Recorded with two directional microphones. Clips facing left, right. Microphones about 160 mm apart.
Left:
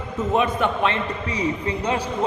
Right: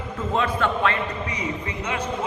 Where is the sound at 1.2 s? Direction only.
35° left (ahead or behind).